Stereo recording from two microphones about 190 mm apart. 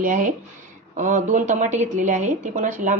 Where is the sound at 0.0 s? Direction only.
45° right (ahead or behind).